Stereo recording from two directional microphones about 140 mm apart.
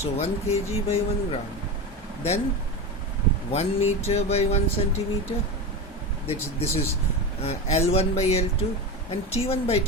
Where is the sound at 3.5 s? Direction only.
50° left (ahead or behind).